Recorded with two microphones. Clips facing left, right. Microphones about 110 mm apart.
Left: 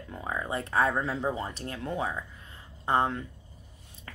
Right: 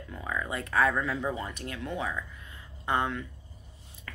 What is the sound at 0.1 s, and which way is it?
Speech, 30° left (ahead or behind).